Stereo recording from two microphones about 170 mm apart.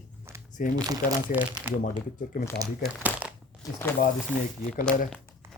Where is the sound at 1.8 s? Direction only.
50° left (ahead or behind).